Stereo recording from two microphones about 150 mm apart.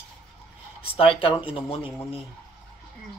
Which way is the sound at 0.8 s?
40° left (ahead or behind).